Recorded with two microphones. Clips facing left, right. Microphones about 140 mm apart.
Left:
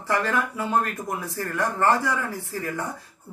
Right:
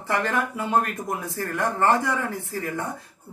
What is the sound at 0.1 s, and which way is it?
Speech, 20° right (ahead or behind).